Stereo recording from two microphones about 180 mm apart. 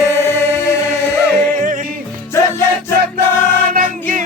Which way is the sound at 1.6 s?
50° right (ahead or behind).